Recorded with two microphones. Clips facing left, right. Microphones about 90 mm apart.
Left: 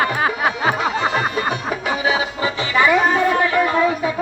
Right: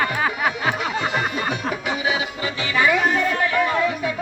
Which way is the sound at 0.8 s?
30° left (ahead or behind).